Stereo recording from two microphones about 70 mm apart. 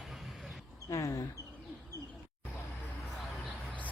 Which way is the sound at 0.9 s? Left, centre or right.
Left.